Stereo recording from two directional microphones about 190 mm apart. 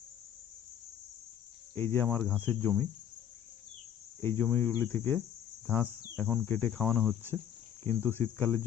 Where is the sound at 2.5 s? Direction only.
10° left (ahead or behind).